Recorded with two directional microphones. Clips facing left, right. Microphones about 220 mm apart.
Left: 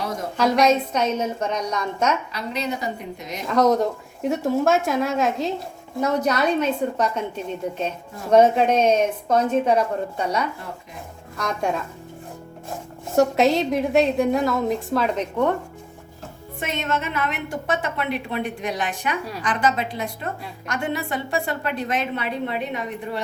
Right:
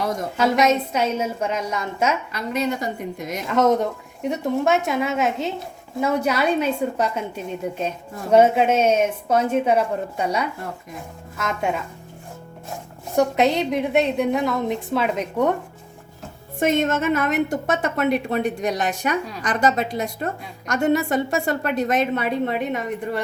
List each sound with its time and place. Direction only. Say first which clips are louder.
0.3 s a woman's voice: left 1 dB; 5° right (ahead or behind)
3.4 s a woman's voice: even; centre (ahead or behind)
13.1 s a woman's voice: left 1 dB; centre (ahead or behind)
16.6 s a woman's voice: right 7 dB; 45° right (ahead or behind)